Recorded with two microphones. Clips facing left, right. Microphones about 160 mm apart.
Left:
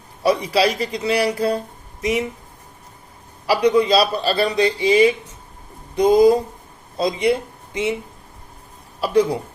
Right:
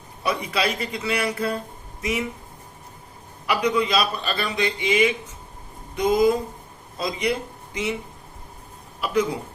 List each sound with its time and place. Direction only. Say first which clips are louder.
0.2 s a man's voice: left 7 dB; 30° left (ahead or behind)
3.4 s a man's voice: left 6 dB; 30° left (ahead or behind)
9.0 s speech: left 6 dB; 30° left (ahead or behind)